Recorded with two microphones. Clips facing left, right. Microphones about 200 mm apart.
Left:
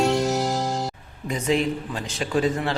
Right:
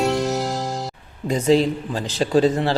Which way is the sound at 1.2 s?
35° right (ahead or behind).